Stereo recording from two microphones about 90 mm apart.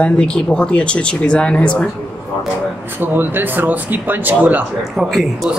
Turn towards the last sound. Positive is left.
turn(degrees=0)  # may be behind; listen again after turning